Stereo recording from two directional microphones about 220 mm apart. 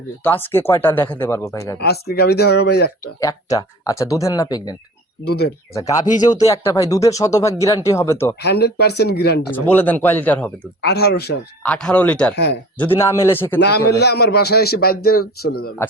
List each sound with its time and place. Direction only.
0.2 s speech: 10° left (ahead or behind)
1.8 s a man's voice: 45° left (ahead or behind)
3.2 s speech: 15° left (ahead or behind)
5.2 s a man's voice: 45° left (ahead or behind)
5.7 s speech: 15° left (ahead or behind)
8.4 s a man's voice: 45° left (ahead or behind)
9.5 s speech: 10° left (ahead or behind)
10.8 s a man's voice: 45° left (ahead or behind)
11.6 s speech: 5° left (ahead or behind)
13.6 s a man's voice: 50° left (ahead or behind)